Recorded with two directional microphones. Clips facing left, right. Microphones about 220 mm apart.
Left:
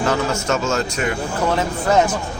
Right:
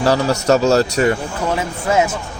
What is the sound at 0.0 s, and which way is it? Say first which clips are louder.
Speech: right 4 dB; 35° right (ahead or behind).